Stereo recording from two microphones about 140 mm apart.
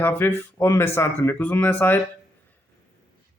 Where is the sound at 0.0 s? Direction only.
15° left (ahead or behind).